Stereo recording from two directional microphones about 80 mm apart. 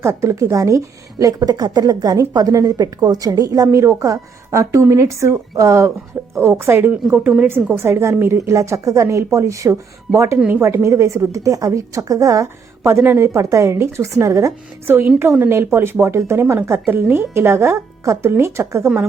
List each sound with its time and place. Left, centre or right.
0.0 s a woman's voice: right
3.7 s a woman's voice: right
7.1 s speech: centre
7.4 s a woman's voice: right
10.3 s a woman's voice: right
10.8 s a woman's voice: right
12.9 s a woman's voice: right
14.8 s a woman's voice: right